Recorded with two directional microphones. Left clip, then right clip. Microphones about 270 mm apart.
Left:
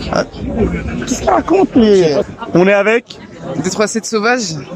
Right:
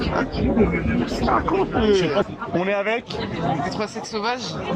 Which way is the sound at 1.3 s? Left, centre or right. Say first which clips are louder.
Left 10 dB; left.